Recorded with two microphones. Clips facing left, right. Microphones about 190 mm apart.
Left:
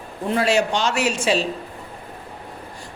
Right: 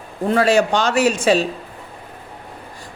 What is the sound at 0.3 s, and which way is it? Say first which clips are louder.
A woman's voice: right 4 dB; 50° right (ahead or behind).